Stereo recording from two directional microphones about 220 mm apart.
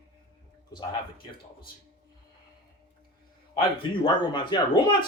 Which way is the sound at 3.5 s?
20° left (ahead or behind).